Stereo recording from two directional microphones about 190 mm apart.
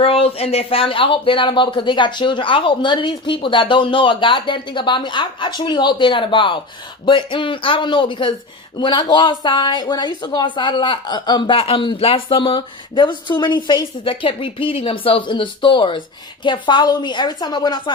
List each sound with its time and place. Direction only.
0.0 s speech: 30° left (ahead or behind)